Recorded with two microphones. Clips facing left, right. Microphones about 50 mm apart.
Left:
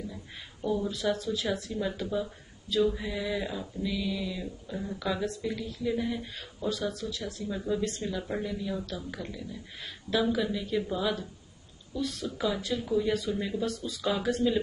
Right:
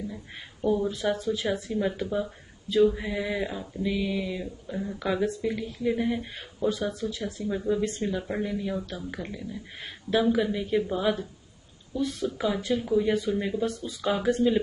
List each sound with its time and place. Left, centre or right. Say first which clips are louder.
0.1 s speech: right 3 dB; right
2.0 s speech: right 2 dB; centre
3.0 s speech: right 3 dB; right
8.2 s speech: right 3 dB; centre
12.7 s speech: right 5 dB; centre